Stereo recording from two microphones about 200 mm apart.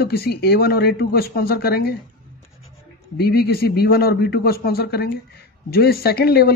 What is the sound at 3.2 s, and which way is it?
Speech, 50° left (ahead or behind).